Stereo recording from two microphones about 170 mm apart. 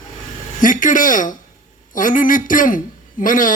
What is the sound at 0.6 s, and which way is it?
A man's voice, 50° left (ahead or behind).